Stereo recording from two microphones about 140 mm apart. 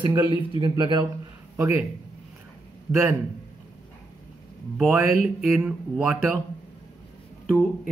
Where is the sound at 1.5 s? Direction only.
20° right (ahead or behind).